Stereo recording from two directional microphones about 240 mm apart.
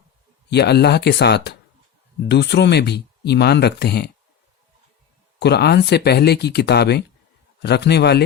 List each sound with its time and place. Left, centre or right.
0.5 s speech: left
5.4 s speech: left